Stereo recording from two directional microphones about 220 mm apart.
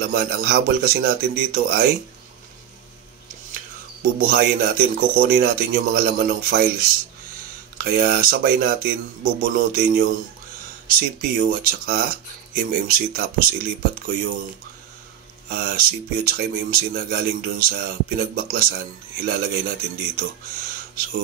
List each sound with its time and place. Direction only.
0.0 s speech: 45° right (ahead or behind)
4.0 s a man's voice: 40° right (ahead or behind)
15.4 s speech: 45° right (ahead or behind)